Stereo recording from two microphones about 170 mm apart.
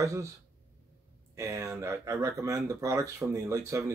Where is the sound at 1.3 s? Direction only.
15° right (ahead or behind).